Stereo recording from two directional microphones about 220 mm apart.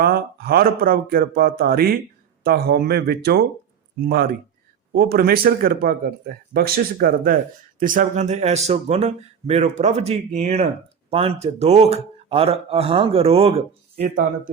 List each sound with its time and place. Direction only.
0.0 s speech: 45° right (ahead or behind); by 13.7 s 25° right (ahead or behind)
13.9 s speech: 40° right (ahead or behind)